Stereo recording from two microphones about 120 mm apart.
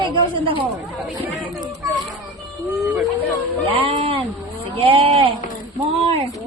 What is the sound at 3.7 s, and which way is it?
Speech, 50° right (ahead or behind).